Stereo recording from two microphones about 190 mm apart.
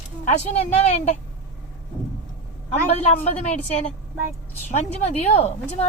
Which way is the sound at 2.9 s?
35° left (ahead or behind).